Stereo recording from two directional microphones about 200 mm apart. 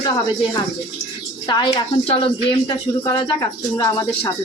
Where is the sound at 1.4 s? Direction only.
20° left (ahead or behind).